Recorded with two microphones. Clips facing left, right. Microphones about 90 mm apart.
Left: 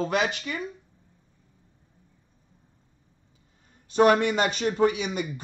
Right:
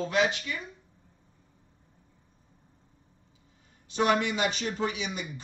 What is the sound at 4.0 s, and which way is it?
Speech, 45° left (ahead or behind).